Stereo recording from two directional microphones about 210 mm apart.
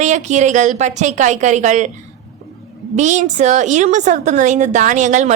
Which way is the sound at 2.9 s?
35° right (ahead or behind).